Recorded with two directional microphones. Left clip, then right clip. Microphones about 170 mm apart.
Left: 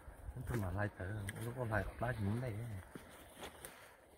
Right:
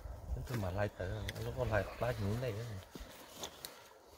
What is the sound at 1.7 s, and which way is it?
Speech, 50° right (ahead or behind).